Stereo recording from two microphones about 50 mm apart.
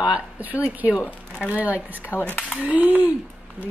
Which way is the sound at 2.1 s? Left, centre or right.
Left.